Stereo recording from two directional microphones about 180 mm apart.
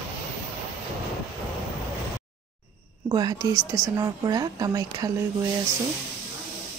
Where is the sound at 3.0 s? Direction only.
25° right (ahead or behind).